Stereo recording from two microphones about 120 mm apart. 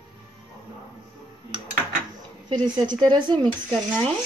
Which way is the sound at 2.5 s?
40° right (ahead or behind).